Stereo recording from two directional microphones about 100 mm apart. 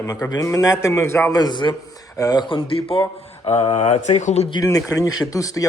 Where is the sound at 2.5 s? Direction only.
65° left (ahead or behind).